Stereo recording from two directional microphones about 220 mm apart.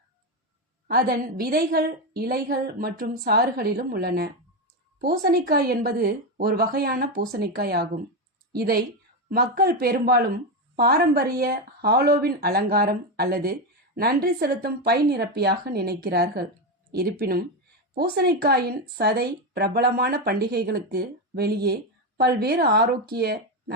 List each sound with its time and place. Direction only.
0.9 s a woman's voice: 45° right (ahead or behind)